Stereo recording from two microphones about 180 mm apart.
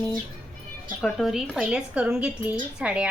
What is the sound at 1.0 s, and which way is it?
A woman's voice, centre (ahead or behind).